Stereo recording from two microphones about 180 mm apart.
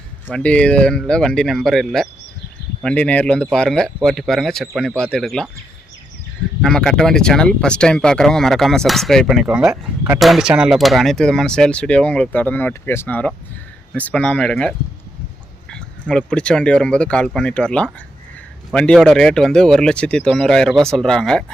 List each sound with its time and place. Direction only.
0.3 s speech: 5° left (ahead or behind)
6.6 s speech: 5° left (ahead or behind)